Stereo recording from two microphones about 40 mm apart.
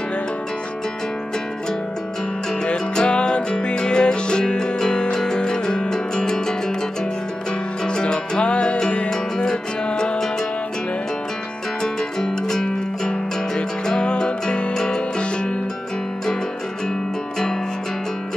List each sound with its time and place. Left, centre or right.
2.6 s music: left
7.8 s music: left
11.8 s music: centre